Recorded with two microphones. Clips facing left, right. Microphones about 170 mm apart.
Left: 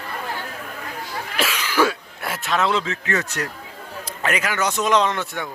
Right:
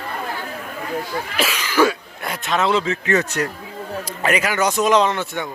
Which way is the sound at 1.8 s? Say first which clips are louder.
Right 3 dB; 10° right (ahead or behind).